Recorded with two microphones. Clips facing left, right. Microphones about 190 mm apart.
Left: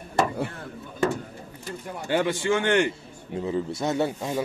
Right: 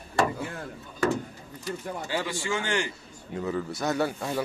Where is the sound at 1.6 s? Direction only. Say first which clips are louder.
Right 2 dB; 55° left (ahead or behind).